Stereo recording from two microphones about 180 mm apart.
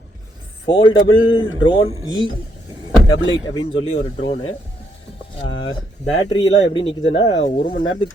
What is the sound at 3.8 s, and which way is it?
Speech, 30° left (ahead or behind).